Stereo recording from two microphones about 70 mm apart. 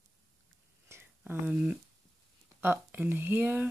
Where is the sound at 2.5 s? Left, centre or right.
Right.